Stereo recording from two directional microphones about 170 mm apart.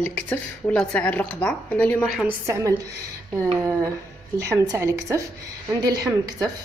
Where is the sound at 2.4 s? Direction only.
15° right (ahead or behind).